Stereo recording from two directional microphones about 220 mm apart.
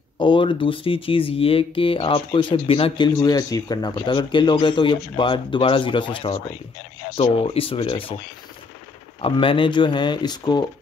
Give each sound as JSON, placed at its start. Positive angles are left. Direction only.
{"t": 0.2, "sound": "speech", "side_deg": 20}
{"t": 9.2, "sound": "speech", "side_deg": 25}